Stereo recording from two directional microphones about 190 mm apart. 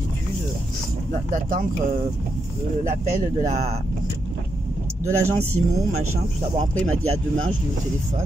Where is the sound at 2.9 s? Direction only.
40° right (ahead or behind).